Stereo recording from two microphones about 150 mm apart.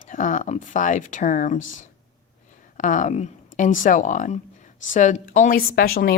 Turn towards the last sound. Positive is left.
turn(degrees=80)